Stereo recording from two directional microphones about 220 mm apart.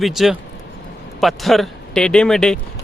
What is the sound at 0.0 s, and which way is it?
Speech, centre (ahead or behind).